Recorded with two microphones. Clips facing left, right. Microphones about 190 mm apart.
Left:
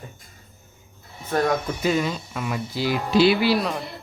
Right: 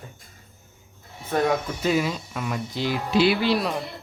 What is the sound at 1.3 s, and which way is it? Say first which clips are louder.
Speech: left 1 dB; 5° right (ahead or behind).